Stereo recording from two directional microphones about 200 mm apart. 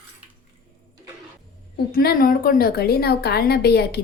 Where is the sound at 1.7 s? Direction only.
50° left (ahead or behind).